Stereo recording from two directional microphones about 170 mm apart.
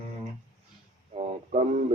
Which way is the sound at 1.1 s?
40° right (ahead or behind).